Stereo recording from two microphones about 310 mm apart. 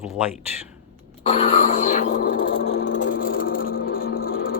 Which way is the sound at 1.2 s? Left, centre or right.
Centre.